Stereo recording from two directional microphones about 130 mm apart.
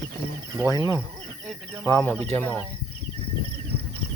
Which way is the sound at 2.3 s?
15° left (ahead or behind).